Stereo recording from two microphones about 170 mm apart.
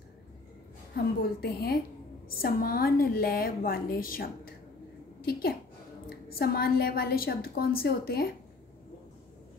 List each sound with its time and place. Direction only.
0.9 s a woman's voice: 65° left (ahead or behind)
6.0 s a woman's voice: 65° left (ahead or behind)